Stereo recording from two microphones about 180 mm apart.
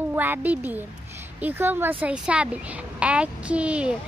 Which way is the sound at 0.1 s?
10° right (ahead or behind).